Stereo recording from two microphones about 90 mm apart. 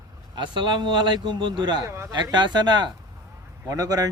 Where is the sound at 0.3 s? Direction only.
60° right (ahead or behind).